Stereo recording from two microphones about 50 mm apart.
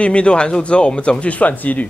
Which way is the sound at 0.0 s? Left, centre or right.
Left.